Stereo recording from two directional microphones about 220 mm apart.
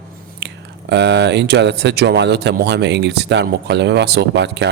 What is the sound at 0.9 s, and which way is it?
Speech, 50° right (ahead or behind).